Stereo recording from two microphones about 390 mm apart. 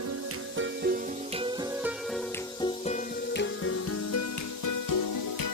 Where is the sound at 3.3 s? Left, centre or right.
Left.